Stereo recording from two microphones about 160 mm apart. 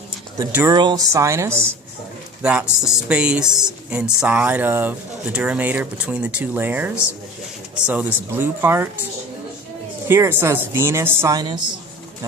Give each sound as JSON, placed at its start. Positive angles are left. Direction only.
{"t": 0.7, "sound": "speech", "side_deg": -25}
{"t": 2.4, "sound": "speech", "side_deg": -5}
{"t": 10.1, "sound": "speech", "side_deg": -15}